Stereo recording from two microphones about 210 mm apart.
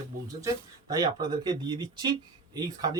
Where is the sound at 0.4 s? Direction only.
15° right (ahead or behind).